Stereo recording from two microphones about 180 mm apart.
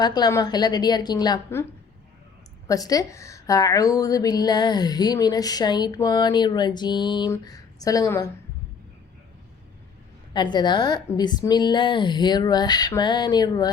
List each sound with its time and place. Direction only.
0.0 s a woman's voice: 20° left (ahead or behind)
2.6 s a woman's voice: 20° left (ahead or behind)
10.3 s a woman's voice: 25° left (ahead or behind)